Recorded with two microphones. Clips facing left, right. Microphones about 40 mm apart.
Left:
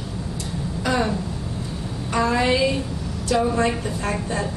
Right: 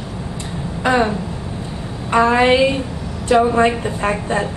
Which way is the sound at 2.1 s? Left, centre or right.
Right.